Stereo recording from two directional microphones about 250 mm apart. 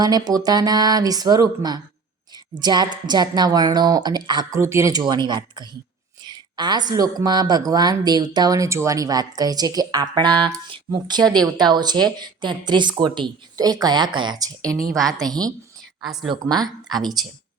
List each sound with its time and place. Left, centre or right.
0.0 s a woman's voice: centre
16.0 s a woman's voice: centre
16.3 s a woman's voice: centre